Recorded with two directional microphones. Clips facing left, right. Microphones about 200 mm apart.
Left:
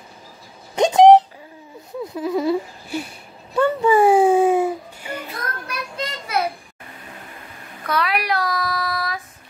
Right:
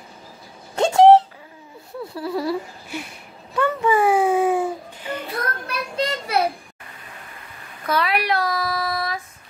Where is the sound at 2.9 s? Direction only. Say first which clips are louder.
Left 5 dB; 35° left (ahead or behind).